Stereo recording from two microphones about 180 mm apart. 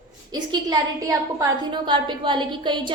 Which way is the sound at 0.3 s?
20° right (ahead or behind).